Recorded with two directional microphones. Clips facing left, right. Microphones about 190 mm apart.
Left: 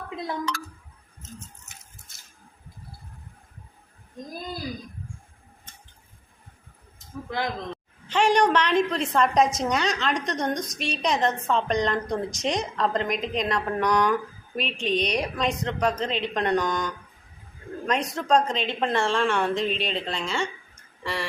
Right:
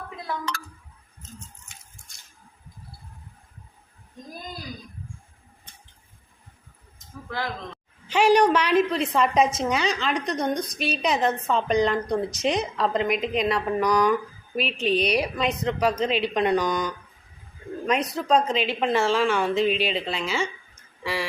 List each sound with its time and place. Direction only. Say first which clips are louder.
7.3 s speech: left 2 dB; 15° left (ahead or behind)
8.0 s a woman's voice: right 3 dB; 10° right (ahead or behind)